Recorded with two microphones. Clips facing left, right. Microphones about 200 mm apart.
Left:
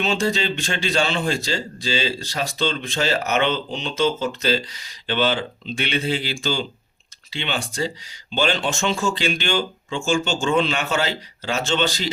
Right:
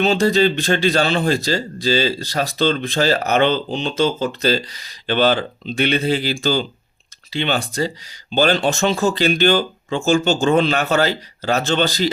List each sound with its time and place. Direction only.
0.0 s speech: 40° right (ahead or behind)
2.6 s speech: 55° right (ahead or behind)
3.0 s speech: 35° right (ahead or behind)